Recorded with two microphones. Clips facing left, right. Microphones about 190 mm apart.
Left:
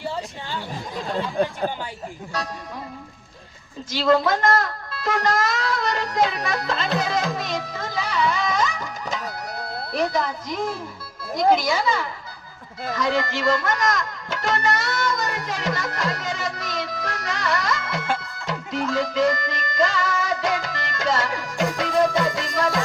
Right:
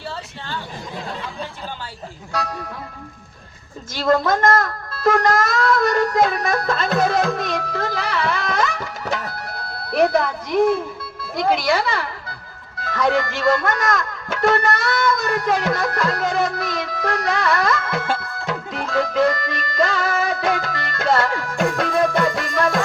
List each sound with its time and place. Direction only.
3.9 s speech: 45° right (ahead or behind)
18.2 s music: 60° right (ahead or behind)